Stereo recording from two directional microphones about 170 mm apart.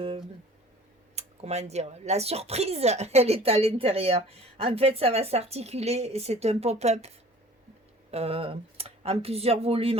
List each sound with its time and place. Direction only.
1.1 s speech: 40° right (ahead or behind)
8.1 s speech: 35° right (ahead or behind)